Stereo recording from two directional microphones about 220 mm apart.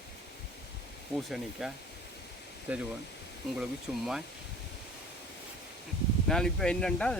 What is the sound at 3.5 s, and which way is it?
Speech, centre (ahead or behind).